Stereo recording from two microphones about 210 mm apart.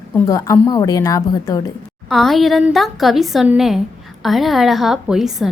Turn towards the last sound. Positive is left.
turn(degrees=0)  # may be behind; listen again after turning